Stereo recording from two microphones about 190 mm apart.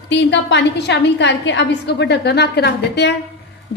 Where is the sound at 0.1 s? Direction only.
65° left (ahead or behind).